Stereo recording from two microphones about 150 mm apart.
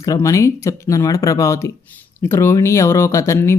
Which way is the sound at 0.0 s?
20° left (ahead or behind).